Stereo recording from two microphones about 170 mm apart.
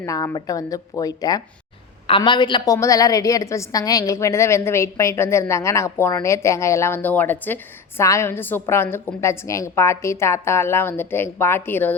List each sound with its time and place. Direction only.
0.0 s a woman's voice: 20° left (ahead or behind)